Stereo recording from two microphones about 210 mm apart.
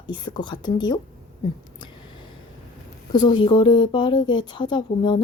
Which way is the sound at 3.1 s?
20° left (ahead or behind).